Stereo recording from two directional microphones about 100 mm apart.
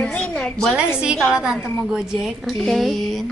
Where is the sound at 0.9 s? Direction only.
10° right (ahead or behind).